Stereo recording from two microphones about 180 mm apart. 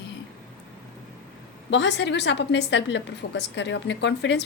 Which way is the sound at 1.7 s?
80° left.